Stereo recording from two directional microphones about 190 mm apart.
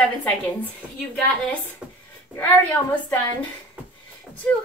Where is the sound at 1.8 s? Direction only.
5° right (ahead or behind).